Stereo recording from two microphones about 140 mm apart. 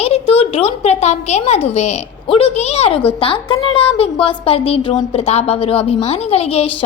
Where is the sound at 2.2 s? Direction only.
40° left (ahead or behind).